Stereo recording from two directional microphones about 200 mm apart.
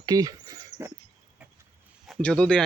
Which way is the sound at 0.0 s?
20° right (ahead or behind).